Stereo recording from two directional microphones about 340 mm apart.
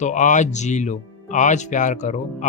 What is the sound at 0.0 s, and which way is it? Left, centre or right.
Speech, left.